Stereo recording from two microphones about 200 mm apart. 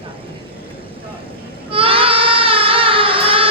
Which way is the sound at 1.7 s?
25° right (ahead or behind).